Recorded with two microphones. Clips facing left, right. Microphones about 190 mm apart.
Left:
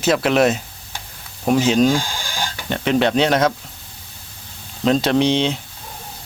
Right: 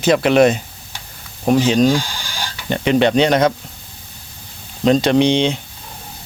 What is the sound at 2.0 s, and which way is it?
Sheep, 50° left (ahead or behind).